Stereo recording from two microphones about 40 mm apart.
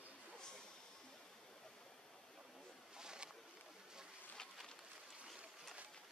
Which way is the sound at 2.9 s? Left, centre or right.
Centre.